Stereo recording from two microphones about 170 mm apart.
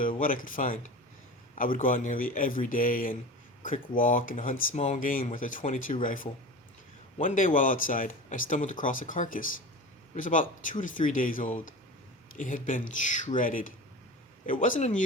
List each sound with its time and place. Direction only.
0.2 s speech: 55° left (ahead or behind)